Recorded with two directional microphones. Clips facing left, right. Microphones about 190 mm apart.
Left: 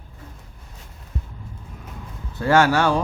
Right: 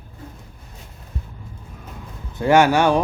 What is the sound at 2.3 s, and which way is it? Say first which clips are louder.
Speech: right 2 dB; 15° right (ahead or behind).